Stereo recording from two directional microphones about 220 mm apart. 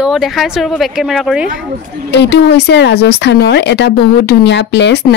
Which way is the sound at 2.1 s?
50° left (ahead or behind).